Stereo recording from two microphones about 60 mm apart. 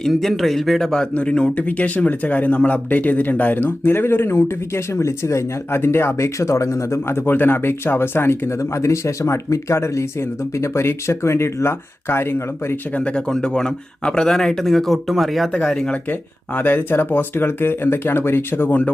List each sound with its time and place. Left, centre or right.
0.1 s speech: centre
1.1 s speech: centre; by 12.7 s left
12.9 s speech: centre
15.6 s speech: centre
16.6 s speech: left